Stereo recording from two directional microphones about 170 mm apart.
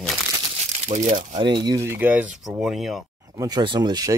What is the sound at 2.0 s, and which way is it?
Speech, 10° right (ahead or behind).